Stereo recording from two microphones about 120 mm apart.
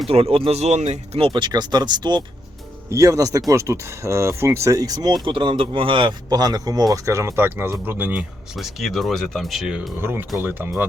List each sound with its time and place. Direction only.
0.1 s speech: 50° right (ahead or behind)
1.3 s speech: 40° right (ahead or behind); by 8.1 s 15° right (ahead or behind)
8.1 s speech: 5° right (ahead or behind)
10.0 s speech: 20° right (ahead or behind)